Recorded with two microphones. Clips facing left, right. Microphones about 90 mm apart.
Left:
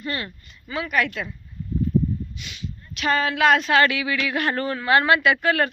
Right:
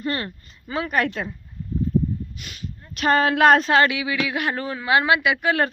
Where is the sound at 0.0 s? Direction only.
35° right (ahead or behind).